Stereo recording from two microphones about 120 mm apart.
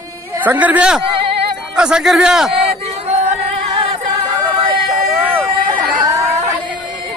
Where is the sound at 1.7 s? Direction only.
5° right (ahead or behind).